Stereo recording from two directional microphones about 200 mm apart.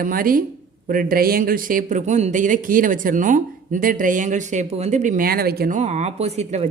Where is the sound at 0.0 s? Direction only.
45° right (ahead or behind).